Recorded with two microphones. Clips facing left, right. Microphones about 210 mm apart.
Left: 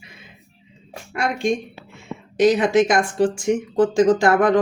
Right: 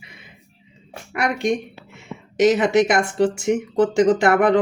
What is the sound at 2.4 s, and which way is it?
Speech, 25° right (ahead or behind).